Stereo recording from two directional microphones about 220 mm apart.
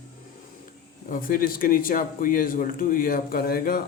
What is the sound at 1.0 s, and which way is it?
Speech, 40° left (ahead or behind).